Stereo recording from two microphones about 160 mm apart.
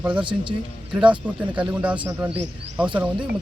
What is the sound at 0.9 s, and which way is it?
Speech, 5° right (ahead or behind).